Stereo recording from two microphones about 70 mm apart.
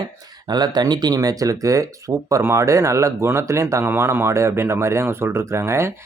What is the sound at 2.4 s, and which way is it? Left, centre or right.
Speech, right.